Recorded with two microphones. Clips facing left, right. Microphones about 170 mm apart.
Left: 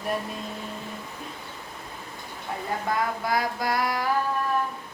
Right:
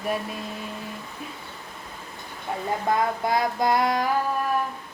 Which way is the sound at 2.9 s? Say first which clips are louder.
Right 3 dB; 20° right (ahead or behind).